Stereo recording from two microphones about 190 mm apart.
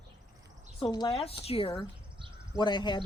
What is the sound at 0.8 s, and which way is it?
Speech, 20° left (ahead or behind).